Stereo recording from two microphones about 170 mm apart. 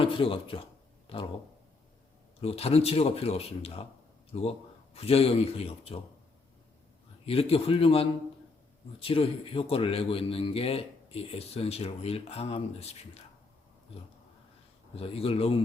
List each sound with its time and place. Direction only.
0.0 s speech: 30° left (ahead or behind)
2.4 s a man's voice: 35° left (ahead or behind)
7.3 s a man's voice: 35° left (ahead or behind)
14.9 s a man's voice: 35° left (ahead or behind)